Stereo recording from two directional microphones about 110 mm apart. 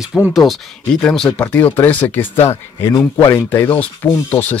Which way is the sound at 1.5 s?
15° left (ahead or behind).